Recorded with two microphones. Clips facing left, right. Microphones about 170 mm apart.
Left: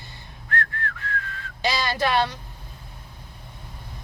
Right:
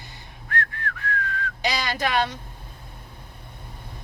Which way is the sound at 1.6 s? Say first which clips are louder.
Left 2 dB; 15° right (ahead or behind).